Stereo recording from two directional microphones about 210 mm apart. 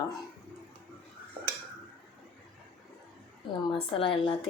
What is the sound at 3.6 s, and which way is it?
Speech, 25° left (ahead or behind).